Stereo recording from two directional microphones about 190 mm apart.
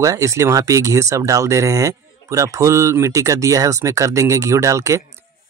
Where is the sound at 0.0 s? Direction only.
15° right (ahead or behind).